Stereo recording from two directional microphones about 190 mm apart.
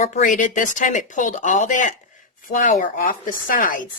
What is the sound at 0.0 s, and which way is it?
A woman's voice, 40° left (ahead or behind).